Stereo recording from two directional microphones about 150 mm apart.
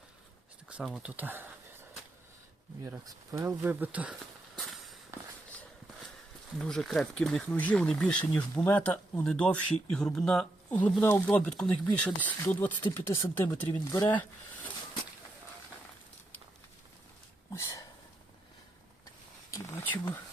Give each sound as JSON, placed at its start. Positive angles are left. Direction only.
{"t": 0.7, "sound": "speech", "side_deg": -5}
{"t": 2.8, "sound": "speech", "side_deg": -20}
{"t": 4.5, "sound": "walk", "side_deg": 0}
{"t": 6.6, "sound": "speech", "side_deg": 5}
{"t": 13.9, "sound": "speech", "side_deg": 25}
{"t": 17.5, "sound": "a sound", "side_deg": 20}
{"t": 19.5, "sound": "a sound", "side_deg": 20}